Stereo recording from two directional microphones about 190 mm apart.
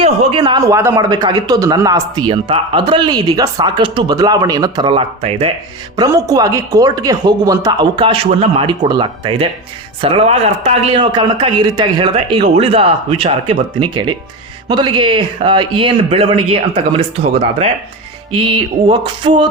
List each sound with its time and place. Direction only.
0.0 s a man's voice: 25° right (ahead or behind)
6.0 s a man's voice: 20° right (ahead or behind)
18.3 s a man's voice: 30° right (ahead or behind)